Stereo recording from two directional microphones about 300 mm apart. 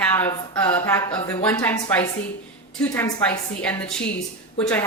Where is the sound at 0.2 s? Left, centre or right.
Centre.